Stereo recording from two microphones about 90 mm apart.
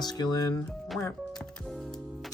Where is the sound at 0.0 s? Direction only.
50° left (ahead or behind).